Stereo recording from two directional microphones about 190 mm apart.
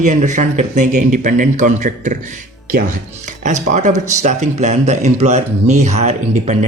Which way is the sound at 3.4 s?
40° right (ahead or behind).